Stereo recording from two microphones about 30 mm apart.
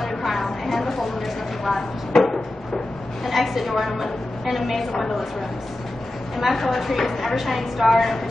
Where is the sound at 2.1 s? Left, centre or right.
Centre.